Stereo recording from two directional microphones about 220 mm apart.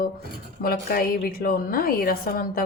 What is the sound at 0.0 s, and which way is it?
Speech, 45° left (ahead or behind).